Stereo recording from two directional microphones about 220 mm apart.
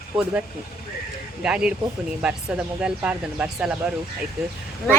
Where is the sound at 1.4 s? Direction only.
5° right (ahead or behind).